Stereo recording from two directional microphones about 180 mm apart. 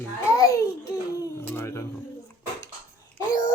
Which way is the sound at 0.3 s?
15° left (ahead or behind).